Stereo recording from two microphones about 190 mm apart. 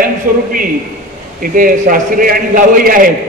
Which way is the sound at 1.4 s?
45° right (ahead or behind).